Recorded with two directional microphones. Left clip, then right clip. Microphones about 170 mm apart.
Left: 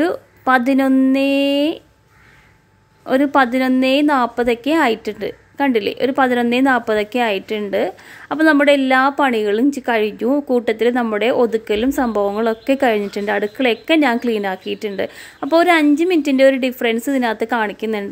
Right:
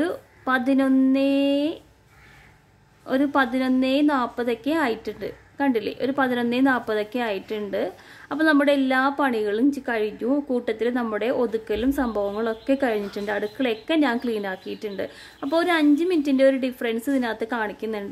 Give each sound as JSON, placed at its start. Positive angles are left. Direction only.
{"t": 0.0, "sound": "a woman's voice", "side_deg": 20}
{"t": 3.1, "sound": "a woman's voice", "side_deg": 20}